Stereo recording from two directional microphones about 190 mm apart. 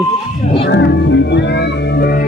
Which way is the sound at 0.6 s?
70° left (ahead or behind).